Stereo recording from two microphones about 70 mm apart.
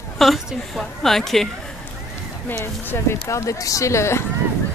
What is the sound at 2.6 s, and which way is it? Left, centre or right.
Speech, left.